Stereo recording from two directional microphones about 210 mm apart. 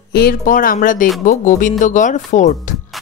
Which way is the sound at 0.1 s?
45° left (ahead or behind).